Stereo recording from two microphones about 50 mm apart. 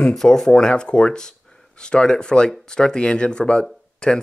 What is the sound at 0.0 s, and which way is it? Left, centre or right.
Speech, centre.